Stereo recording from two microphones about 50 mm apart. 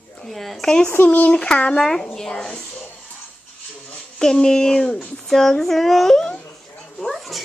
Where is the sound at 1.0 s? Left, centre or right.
Left; by 2.6 s centre.